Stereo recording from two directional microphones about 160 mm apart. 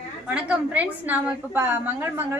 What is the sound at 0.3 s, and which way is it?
A woman's voice, 10° right (ahead or behind).